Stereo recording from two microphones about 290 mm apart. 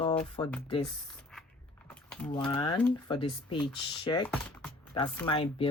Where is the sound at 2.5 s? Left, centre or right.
Centre.